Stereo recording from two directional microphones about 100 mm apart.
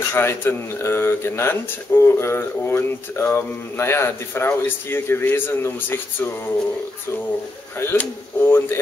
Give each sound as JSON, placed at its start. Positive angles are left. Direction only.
{"t": 0.1, "sound": "speech", "side_deg": 25}
{"t": 7.8, "sound": "speech", "side_deg": 20}